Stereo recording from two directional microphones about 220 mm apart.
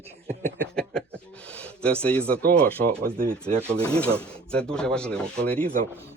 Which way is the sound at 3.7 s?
5° left (ahead or behind).